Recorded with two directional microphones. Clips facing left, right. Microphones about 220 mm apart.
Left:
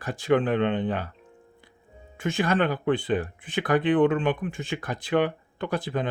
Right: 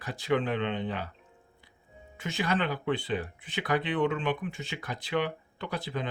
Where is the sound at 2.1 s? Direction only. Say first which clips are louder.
Left 6 dB; 50° left (ahead or behind).